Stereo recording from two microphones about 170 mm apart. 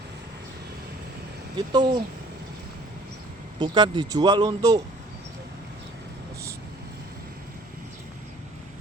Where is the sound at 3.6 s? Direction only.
25° right (ahead or behind).